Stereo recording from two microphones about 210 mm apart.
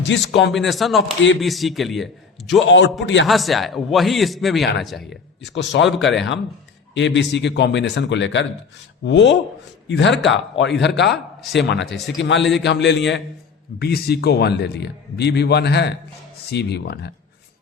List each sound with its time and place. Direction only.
0.0 s speech: 60° left (ahead or behind)
0.5 s speech: centre (ahead or behind)
2.6 s speech: 60° left (ahead or behind)
3.2 s speech: centre (ahead or behind)
5.0 s a man's voice: 55° left (ahead or behind)